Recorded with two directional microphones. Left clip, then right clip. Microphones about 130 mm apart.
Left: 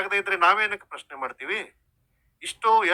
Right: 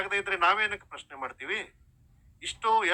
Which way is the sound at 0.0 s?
35° left (ahead or behind).